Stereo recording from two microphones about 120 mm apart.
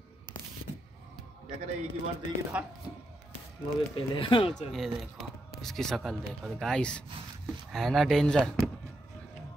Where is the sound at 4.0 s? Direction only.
45° left (ahead or behind).